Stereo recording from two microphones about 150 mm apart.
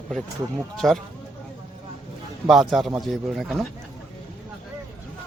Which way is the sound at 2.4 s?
Centre (ahead or behind).